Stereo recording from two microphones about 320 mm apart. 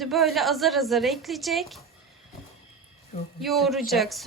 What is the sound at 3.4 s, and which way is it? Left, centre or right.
Speech, centre.